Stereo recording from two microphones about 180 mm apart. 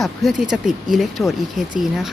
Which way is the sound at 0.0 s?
Centre (ahead or behind).